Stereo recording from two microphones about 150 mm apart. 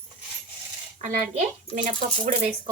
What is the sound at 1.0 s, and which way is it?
A woman's voice, 55° right (ahead or behind).